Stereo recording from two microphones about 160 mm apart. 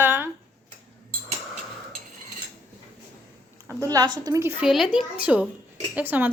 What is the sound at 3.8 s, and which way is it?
Speech, 25° right (ahead or behind).